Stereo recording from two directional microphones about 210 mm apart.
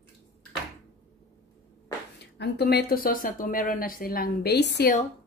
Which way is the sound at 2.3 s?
50° left (ahead or behind).